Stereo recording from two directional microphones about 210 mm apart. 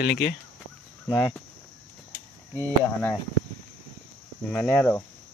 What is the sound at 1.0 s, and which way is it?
Speech, 10° left (ahead or behind).